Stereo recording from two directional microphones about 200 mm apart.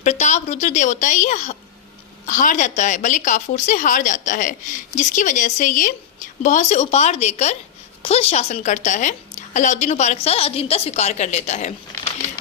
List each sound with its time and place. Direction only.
0.0 s a woman's voice: 35° left (ahead or behind)